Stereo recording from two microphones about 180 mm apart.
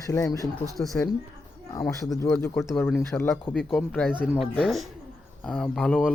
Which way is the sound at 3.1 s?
10° left (ahead or behind).